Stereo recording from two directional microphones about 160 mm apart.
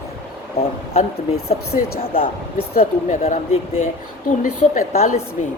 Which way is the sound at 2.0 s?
35° left (ahead or behind).